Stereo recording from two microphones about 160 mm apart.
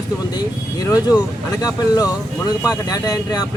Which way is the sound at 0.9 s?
25° left (ahead or behind).